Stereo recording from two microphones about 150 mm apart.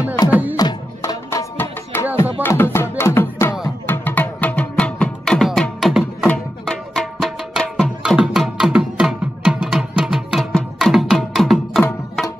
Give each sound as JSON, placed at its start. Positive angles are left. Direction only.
{"t": 0.3, "sound": "music", "side_deg": -10}
{"t": 0.6, "sound": "music", "side_deg": 25}